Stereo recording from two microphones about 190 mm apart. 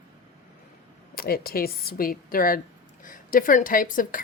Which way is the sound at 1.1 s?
55° left (ahead or behind).